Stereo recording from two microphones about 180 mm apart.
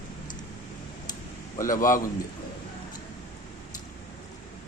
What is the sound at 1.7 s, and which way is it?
Speech, 45° left (ahead or behind).